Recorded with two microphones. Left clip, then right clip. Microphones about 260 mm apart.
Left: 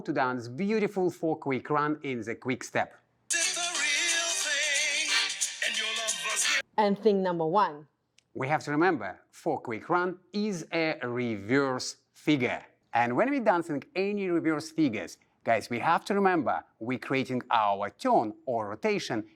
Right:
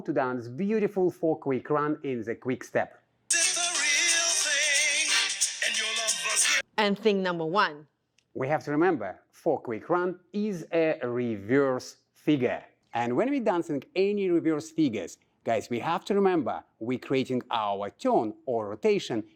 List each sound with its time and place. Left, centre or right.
0.0 s speech: left
3.2 s music: centre
7.0 s a woman's voice: centre
8.4 s speech: left